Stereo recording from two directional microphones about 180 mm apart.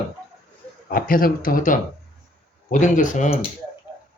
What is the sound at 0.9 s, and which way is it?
Speech, 55° left (ahead or behind).